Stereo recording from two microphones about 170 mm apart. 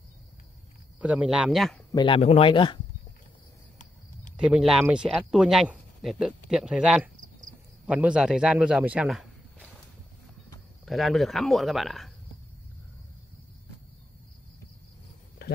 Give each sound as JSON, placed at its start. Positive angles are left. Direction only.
{"t": 1.0, "sound": "speech", "side_deg": -5}
{"t": 1.9, "sound": "speech", "side_deg": 25}
{"t": 4.4, "sound": "speech", "side_deg": -5}
{"t": 10.9, "sound": "speech", "side_deg": 0}